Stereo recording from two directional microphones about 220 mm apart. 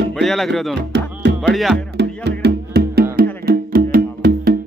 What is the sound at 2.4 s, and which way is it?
Music, 50° right (ahead or behind).